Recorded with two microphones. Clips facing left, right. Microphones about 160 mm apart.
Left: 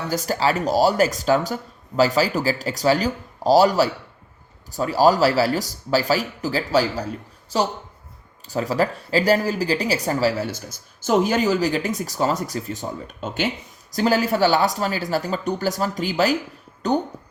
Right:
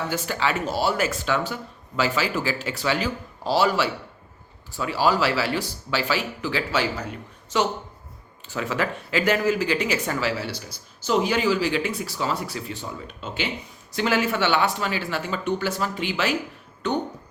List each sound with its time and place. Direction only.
0.1 s speech: 40° left (ahead or behind)